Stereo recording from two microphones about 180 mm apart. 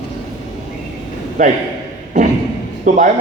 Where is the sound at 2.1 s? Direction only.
45° right (ahead or behind).